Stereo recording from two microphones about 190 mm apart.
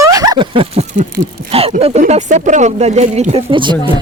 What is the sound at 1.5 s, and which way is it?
A woman's voice, 30° right (ahead or behind).